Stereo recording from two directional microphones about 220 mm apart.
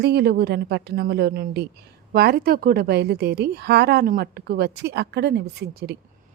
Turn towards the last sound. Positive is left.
turn(degrees=-45)  # may be behind; listen again after turning